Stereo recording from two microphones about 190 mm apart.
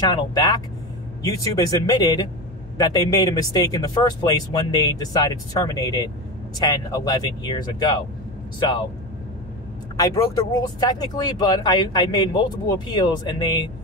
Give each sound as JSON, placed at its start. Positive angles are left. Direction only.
{"t": 0.0, "sound": "speech", "side_deg": 20}
{"t": 9.9, "sound": "speech", "side_deg": 20}